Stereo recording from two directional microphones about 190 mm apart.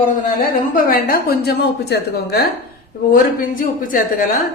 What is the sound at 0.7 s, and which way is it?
A woman's voice, 50° left (ahead or behind).